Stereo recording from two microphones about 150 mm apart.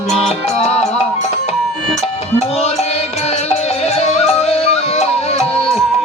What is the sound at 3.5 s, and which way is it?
Music, 45° left (ahead or behind).